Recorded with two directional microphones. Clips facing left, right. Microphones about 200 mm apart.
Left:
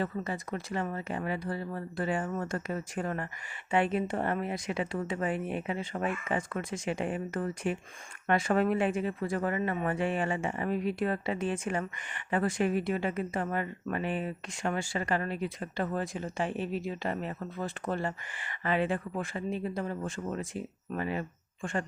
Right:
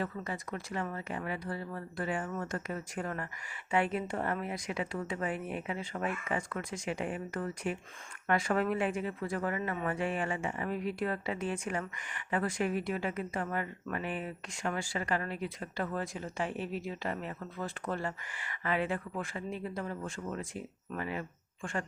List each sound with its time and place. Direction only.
0.0 s speech: 30° left (ahead or behind)